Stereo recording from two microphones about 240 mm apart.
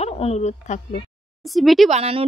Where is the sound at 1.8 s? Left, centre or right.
Right.